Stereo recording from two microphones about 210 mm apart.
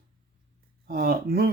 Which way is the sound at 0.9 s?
45° right (ahead or behind).